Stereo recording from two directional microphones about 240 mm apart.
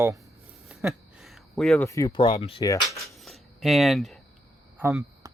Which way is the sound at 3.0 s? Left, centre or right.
Centre.